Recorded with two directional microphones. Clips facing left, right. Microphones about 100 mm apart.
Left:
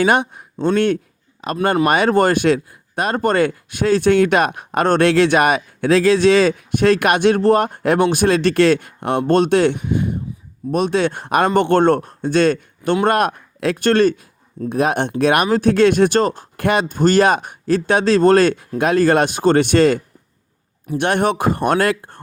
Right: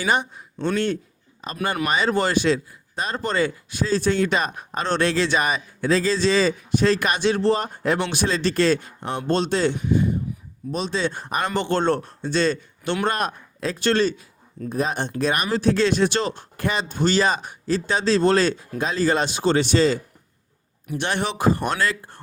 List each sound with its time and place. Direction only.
0.0 s speech: 60° left (ahead or behind)
1.4 s speech: 70° left (ahead or behind)
1.9 s speech: 55° left (ahead or behind)
14.7 s speech: 65° left (ahead or behind)
21.0 s speech: 55° left (ahead or behind)